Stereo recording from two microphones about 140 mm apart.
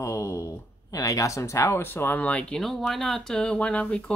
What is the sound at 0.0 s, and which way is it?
Speech, 20° left (ahead or behind).